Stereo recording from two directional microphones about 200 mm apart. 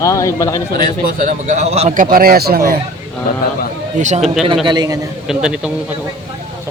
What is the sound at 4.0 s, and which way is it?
Speech, 35° right (ahead or behind).